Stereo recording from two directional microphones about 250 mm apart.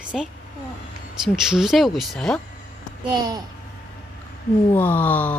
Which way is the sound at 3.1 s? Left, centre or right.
Centre.